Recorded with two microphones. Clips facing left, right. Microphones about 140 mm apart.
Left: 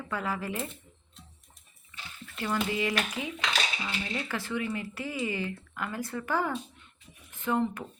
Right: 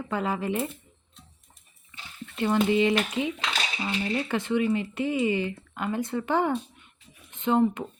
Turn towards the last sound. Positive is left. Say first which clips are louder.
# right 6 dB
turn(degrees=-20)  # may be behind; listen again after turning